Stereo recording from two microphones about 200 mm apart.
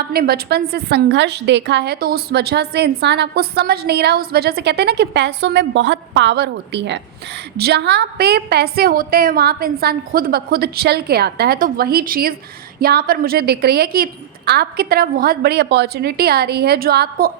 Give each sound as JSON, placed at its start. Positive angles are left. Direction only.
{"t": 0.1, "sound": "a woman's voice", "side_deg": -50}